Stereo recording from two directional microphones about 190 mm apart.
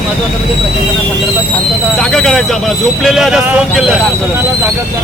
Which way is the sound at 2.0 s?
5° left (ahead or behind).